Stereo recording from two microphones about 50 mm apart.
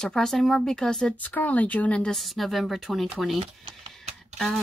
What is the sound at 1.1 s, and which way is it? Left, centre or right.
Speech, left.